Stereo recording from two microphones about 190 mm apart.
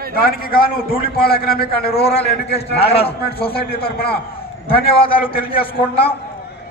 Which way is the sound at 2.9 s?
30° left (ahead or behind).